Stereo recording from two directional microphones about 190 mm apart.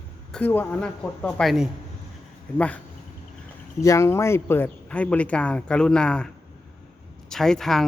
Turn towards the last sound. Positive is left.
turn(degrees=0)  # may be behind; listen again after turning